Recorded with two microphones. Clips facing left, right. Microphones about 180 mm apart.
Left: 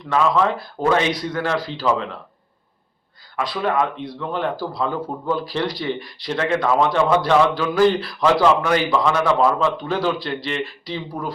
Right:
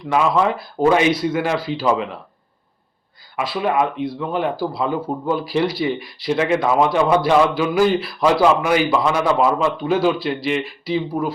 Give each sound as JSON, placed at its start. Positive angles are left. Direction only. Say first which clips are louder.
{"t": 0.1, "sound": "speech", "louder": "right 1 dB", "side_deg": -10}
{"t": 3.3, "sound": "speech", "louder": "right 2 dB", "side_deg": -10}